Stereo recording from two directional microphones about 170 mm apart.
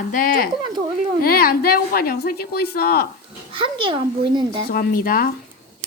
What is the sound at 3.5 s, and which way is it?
A child's voice, 30° right (ahead or behind).